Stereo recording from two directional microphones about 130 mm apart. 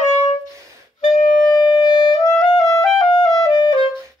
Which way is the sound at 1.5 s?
35° left (ahead or behind).